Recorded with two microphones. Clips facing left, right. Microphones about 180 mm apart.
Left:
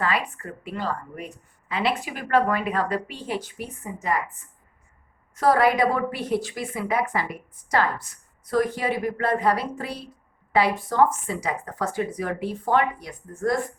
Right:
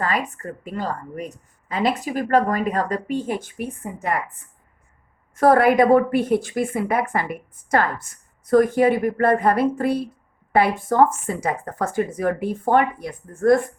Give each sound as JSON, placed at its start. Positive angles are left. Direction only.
{"t": 0.0, "sound": "a woman's voice", "side_deg": -45}